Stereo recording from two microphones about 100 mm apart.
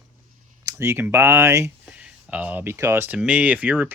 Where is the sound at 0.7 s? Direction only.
30° right (ahead or behind).